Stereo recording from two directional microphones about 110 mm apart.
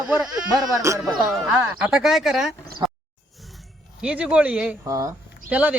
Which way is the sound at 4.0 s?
10° right (ahead or behind).